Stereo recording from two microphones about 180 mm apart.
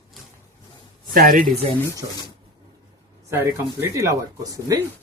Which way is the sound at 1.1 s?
50° right (ahead or behind).